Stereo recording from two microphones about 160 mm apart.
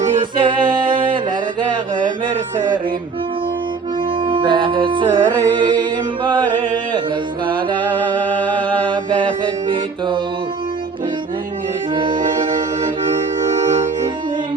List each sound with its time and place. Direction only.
0.0 s music: 50° right (ahead or behind)
0.7 s music: 30° right (ahead or behind)
4.3 s music: 30° right (ahead or behind)
8.9 s music: 30° right (ahead or behind)